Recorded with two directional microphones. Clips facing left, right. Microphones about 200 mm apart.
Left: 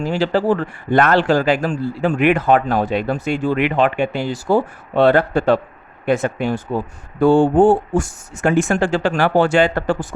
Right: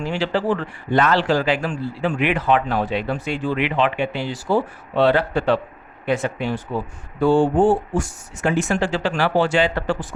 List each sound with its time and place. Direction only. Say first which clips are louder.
0.0 s speech: left 4 dB; 40° left (ahead or behind)